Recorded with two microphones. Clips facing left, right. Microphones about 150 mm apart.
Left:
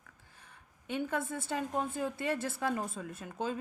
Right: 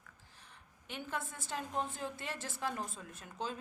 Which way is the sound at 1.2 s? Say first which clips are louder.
Left 7 dB; 55° left (ahead or behind).